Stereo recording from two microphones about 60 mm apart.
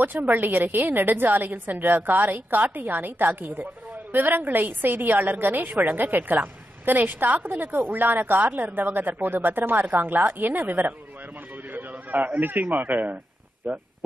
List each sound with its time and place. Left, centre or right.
0.0 s speech: right
11.5 s a sound: right
12.4 s speech: right